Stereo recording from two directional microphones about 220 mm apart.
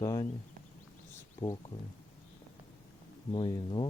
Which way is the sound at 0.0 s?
15° left (ahead or behind).